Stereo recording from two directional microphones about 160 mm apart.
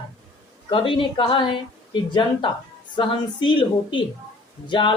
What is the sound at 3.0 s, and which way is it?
Speech, 30° left (ahead or behind).